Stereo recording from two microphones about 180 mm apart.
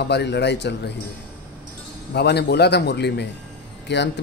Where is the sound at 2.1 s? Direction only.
65° left (ahead or behind).